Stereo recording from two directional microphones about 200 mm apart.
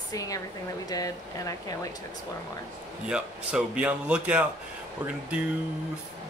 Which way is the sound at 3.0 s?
5° right (ahead or behind).